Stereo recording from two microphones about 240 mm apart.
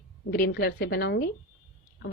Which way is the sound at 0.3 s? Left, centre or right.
Left.